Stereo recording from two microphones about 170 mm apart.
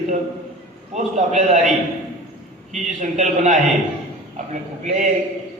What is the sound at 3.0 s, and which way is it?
Speech, 50° right (ahead or behind).